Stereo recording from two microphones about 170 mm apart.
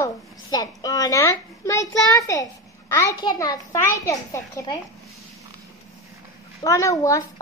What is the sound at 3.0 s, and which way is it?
A child's voice, 20° left (ahead or behind).